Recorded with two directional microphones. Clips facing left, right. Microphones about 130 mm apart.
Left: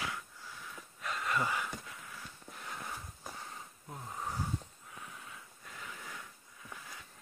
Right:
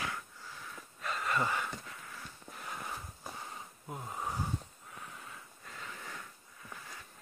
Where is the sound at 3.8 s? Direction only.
20° right (ahead or behind).